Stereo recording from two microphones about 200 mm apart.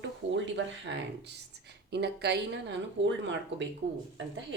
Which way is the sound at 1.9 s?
55° right (ahead or behind).